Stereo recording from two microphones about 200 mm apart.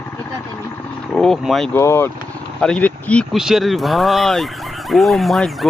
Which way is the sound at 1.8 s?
10° left (ahead or behind).